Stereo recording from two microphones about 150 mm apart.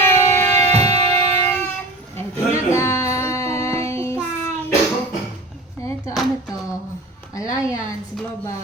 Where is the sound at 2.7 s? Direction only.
20° left (ahead or behind).